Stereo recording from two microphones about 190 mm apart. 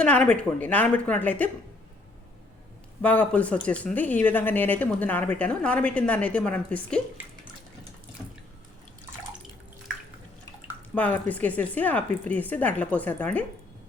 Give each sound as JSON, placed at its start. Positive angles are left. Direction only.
{"t": 0.0, "sound": "speech", "side_deg": 5}
{"t": 3.0, "sound": "speech", "side_deg": 5}
{"t": 10.9, "sound": "speech", "side_deg": 10}